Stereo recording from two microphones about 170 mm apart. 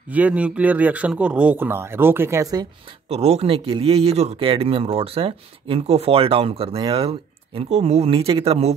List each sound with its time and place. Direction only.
0.1 s speech: 10° right (ahead or behind)
3.1 s speech: 40° right (ahead or behind)